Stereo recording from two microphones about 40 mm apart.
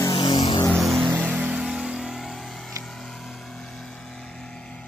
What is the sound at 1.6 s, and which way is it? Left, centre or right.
Vehicle, centre.